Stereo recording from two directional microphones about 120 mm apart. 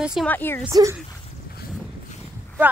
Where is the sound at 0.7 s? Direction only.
30° right (ahead or behind).